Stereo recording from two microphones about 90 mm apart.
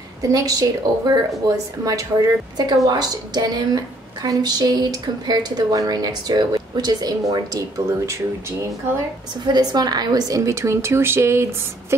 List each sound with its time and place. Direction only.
0.3 s a woman's voice: 45° right (ahead or behind)
9.5 s a woman's voice: 50° right (ahead or behind); by 11.4 s 30° right (ahead or behind)